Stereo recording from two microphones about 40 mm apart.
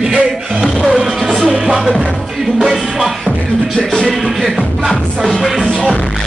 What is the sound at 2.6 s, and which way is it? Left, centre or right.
Music, centre.